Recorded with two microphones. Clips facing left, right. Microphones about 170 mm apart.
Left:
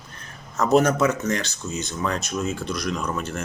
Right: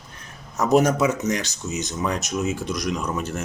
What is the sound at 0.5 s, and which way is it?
Speech, 10° right (ahead or behind).